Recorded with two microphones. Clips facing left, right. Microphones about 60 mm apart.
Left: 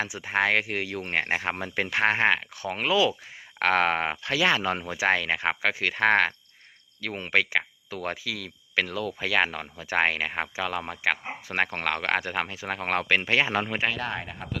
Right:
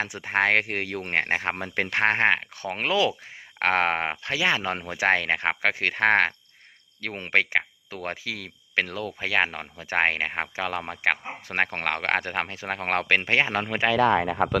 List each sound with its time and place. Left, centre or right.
0.0 s speech: right
3.6 s speech: right
13.7 s speech: right